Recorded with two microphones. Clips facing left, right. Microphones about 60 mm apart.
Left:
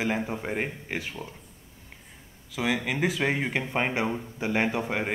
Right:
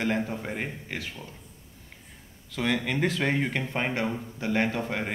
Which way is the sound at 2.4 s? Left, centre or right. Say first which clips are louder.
Even; centre.